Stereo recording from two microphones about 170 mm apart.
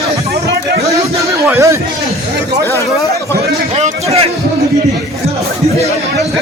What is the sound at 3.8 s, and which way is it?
Speech, 35° right (ahead or behind).